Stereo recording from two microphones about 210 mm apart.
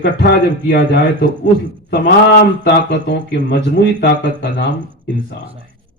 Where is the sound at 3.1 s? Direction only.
50° left (ahead or behind).